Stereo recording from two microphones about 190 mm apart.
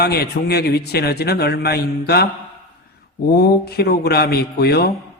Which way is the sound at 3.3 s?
55° left (ahead or behind).